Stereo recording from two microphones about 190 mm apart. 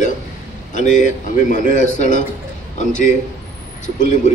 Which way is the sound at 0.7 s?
40° left (ahead or behind).